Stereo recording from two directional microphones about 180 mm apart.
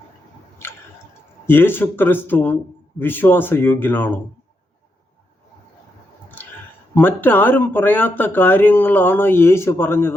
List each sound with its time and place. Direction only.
1.5 s speech: 10° left (ahead or behind)
6.4 s clicking: 10° left (ahead or behind)
6.9 s speech: 10° left (ahead or behind)